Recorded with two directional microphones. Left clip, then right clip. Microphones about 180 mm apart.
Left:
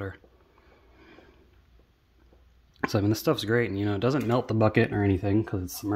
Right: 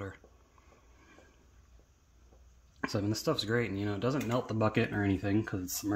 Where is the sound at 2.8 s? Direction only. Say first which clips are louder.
Left 7 dB; 45° left (ahead or behind).